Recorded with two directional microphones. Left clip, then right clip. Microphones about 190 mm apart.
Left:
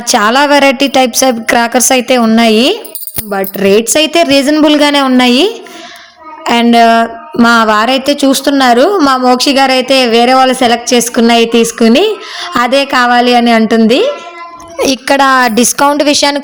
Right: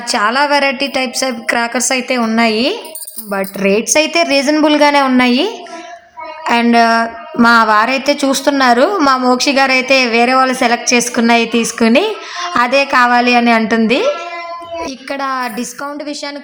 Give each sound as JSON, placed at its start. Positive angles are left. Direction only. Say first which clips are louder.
{"t": 0.1, "sound": "a woman's voice", "louder": "left 5 dB", "side_deg": 35}
{"t": 14.8, "sound": "a woman's voice", "louder": "left 14 dB", "side_deg": 50}